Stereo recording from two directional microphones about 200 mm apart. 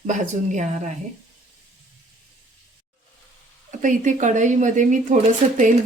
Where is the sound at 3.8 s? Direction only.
40° right (ahead or behind).